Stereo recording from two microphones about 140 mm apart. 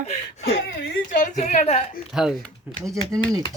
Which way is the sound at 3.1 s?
25° right (ahead or behind).